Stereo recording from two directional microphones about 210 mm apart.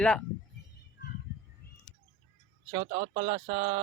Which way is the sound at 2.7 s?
25° right (ahead or behind).